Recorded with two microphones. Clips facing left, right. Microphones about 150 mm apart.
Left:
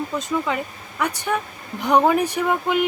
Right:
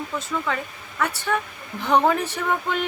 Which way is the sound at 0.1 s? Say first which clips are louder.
Left 3 dB; 15° left (ahead or behind).